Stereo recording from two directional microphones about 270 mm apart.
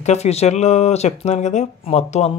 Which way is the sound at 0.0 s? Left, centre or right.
Left.